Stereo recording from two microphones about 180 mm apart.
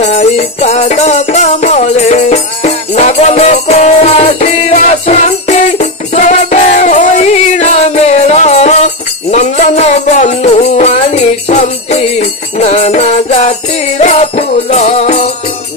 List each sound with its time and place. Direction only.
0.0 s music: 40° left (ahead or behind)